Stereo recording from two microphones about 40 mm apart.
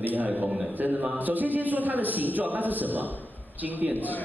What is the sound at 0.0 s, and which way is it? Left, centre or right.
A man's voice, right.